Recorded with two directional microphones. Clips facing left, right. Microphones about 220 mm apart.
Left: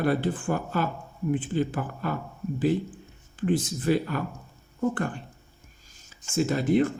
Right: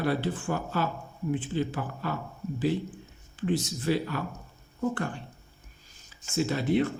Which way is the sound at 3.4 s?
50° left (ahead or behind).